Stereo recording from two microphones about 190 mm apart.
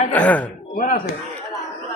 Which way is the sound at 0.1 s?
10° left (ahead or behind).